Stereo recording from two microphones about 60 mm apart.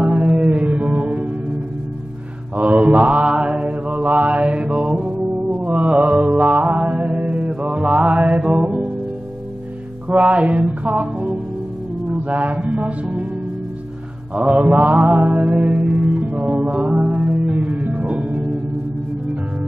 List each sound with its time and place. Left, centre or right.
0.3 s music: centre
2.5 s mantra: right
3.9 s mantra: right
8.4 s music: centre
10.0 s music: right
12.4 s mantra: right
12.6 s music: right
14.3 s mantra: centre
15.0 s music: right